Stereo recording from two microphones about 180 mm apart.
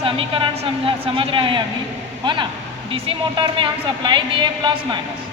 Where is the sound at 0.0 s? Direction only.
30° right (ahead or behind).